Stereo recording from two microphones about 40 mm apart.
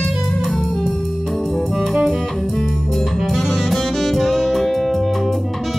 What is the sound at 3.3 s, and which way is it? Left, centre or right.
Music, centre.